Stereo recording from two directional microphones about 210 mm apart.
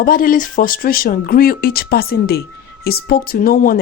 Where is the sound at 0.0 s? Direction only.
40° left (ahead or behind).